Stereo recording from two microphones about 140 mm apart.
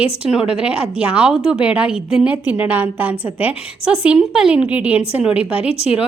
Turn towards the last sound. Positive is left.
turn(degrees=45)  # may be behind; listen again after turning